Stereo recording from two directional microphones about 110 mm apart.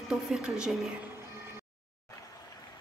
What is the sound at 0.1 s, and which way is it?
Speech, 5° right (ahead or behind).